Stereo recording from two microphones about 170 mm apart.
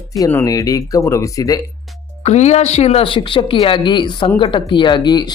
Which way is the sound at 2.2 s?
40° left (ahead or behind).